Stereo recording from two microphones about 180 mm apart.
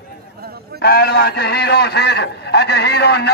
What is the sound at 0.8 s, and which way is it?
A man's voice, 60° left (ahead or behind).